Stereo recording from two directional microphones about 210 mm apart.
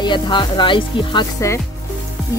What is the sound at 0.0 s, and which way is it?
Speech, 20° left (ahead or behind).